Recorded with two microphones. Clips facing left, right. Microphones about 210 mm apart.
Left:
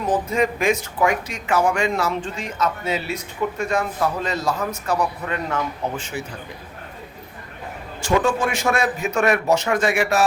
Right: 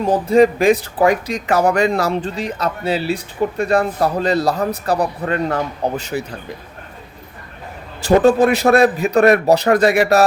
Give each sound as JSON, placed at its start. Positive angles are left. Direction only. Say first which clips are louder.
{"t": 0.0, "sound": "speech", "louder": "right 8 dB", "side_deg": -35}
{"t": 8.0, "sound": "speech", "louder": "right 8 dB", "side_deg": -35}